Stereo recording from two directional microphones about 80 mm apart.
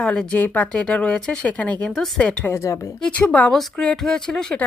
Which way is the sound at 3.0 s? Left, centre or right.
Centre.